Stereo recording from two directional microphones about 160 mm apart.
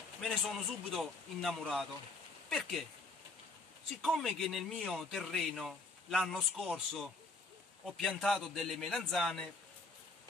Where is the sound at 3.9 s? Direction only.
Centre (ahead or behind).